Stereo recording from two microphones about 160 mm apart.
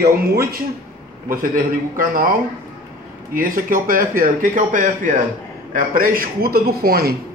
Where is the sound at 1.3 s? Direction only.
60° right (ahead or behind).